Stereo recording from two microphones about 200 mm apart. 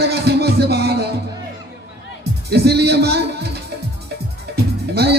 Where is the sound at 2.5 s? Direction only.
55° right (ahead or behind).